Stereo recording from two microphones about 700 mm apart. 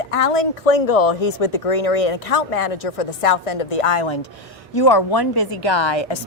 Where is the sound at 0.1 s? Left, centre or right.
Left.